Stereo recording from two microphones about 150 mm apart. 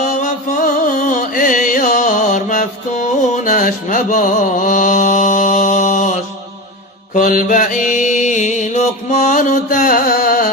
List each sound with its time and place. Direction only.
0.1 s music: 60° left (ahead or behind)
7.1 s mantra: 65° left (ahead or behind)